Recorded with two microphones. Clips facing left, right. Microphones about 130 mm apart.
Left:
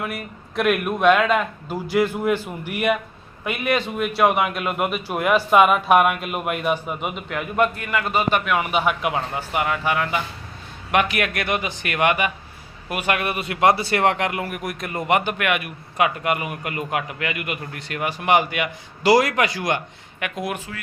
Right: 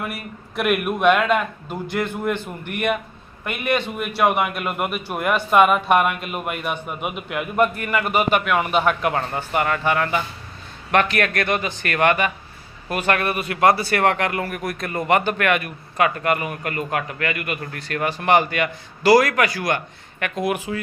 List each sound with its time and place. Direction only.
0.0 s a man's voice: 5° right (ahead or behind)